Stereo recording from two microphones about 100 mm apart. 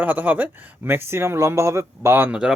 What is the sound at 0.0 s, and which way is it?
Speech, 15° right (ahead or behind).